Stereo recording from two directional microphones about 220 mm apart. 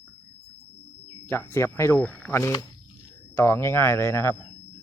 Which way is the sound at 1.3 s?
10° left (ahead or behind).